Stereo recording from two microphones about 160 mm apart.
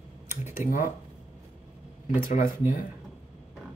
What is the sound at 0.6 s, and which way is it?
Speech, 60° left (ahead or behind).